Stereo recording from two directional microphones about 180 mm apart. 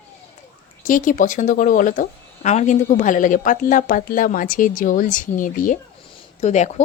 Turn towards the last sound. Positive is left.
turn(degrees=40)  # may be behind; listen again after turning